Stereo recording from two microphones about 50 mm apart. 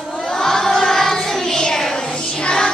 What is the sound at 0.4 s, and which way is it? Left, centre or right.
Choir, centre.